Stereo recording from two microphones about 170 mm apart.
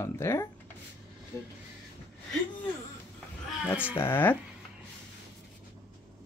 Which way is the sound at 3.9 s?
10° left (ahead or behind).